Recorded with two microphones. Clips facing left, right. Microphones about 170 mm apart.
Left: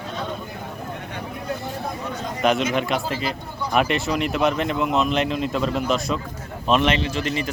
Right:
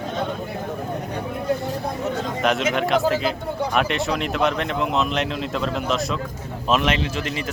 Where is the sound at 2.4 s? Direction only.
Centre (ahead or behind).